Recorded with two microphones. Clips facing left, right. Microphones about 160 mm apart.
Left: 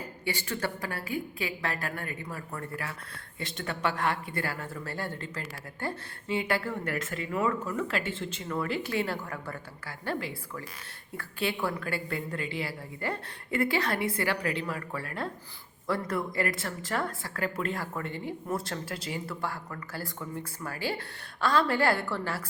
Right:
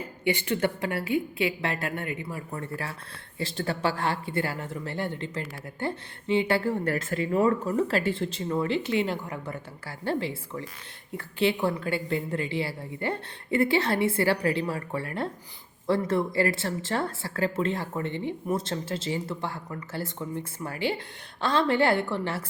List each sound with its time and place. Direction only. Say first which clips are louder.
0.3 s speech: right 7 dB; 20° right (ahead or behind)